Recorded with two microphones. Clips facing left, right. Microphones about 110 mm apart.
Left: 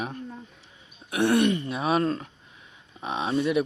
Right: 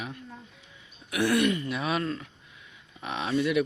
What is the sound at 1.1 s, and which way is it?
Speech, 30° left (ahead or behind).